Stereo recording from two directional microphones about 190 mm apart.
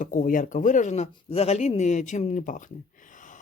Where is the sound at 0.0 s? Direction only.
45° left (ahead or behind).